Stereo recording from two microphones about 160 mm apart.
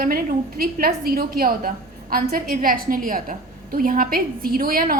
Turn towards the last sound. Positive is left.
turn(degrees=-60)  # may be behind; listen again after turning